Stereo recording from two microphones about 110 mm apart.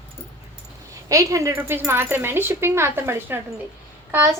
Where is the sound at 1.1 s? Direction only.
30° right (ahead or behind).